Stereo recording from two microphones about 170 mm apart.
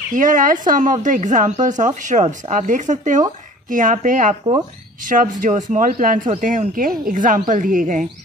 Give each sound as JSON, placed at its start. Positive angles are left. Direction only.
{"t": 0.1, "sound": "speech", "side_deg": -50}